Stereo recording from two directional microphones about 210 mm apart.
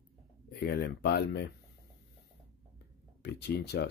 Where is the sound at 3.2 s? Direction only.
50° left (ahead or behind).